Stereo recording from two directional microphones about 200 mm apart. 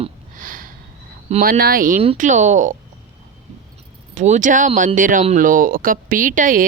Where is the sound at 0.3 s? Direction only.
45° right (ahead or behind).